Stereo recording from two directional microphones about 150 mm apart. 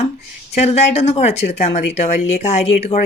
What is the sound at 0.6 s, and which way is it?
Speech, 45° left (ahead or behind).